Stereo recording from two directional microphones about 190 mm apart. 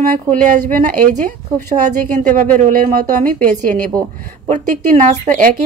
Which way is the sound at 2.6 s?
45° right (ahead or behind).